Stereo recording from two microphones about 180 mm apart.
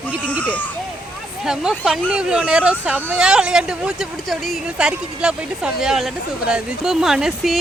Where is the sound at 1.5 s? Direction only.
5° right (ahead or behind).